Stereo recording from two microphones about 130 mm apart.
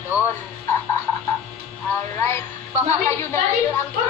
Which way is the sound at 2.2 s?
20° left (ahead or behind).